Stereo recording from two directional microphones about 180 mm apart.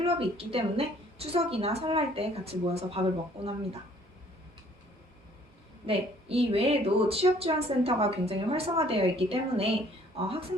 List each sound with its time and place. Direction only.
0.0 s a woman's voice: 30° right (ahead or behind)
5.8 s a woman's voice: 30° right (ahead or behind)